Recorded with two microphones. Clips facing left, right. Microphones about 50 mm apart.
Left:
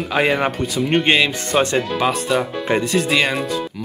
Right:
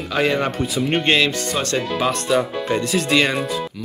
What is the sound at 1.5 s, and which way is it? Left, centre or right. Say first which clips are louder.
Speech: left 5 dB; left.